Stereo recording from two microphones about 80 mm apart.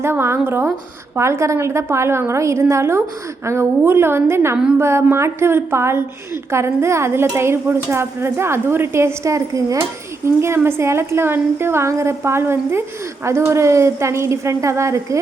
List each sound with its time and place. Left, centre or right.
0.0 s a woman's voice: right
10.2 s a woman's voice: right